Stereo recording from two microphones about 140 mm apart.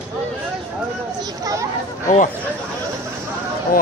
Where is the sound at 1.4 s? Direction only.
25° right (ahead or behind).